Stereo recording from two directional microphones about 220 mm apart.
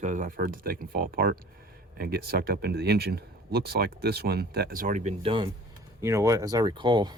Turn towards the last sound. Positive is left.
turn(degrees=-20)  # may be behind; listen again after turning